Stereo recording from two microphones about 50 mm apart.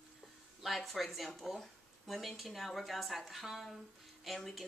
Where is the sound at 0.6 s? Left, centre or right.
Centre.